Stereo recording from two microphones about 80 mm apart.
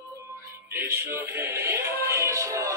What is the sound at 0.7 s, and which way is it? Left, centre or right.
Music, right.